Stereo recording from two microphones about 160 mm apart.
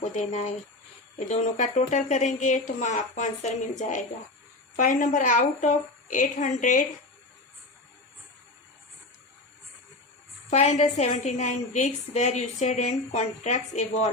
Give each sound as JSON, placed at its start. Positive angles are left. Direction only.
{"t": 0.0, "sound": "a woman's voice", "side_deg": 45}
{"t": 10.5, "sound": "a woman's voice", "side_deg": 45}